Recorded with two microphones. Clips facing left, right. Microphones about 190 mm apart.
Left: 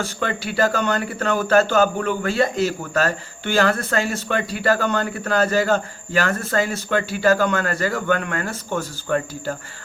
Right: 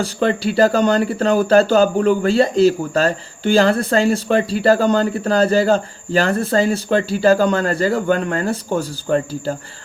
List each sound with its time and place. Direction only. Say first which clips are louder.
0.0 s speech: right 7 dB; 30° right (ahead or behind)